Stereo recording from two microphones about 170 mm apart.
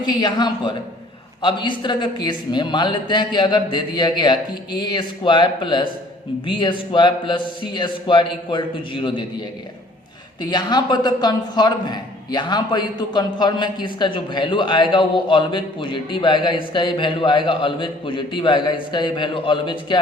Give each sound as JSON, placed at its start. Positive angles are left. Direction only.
{"t": 0.0, "sound": "a man's voice", "side_deg": 25}
{"t": 10.4, "sound": "a man's voice", "side_deg": 25}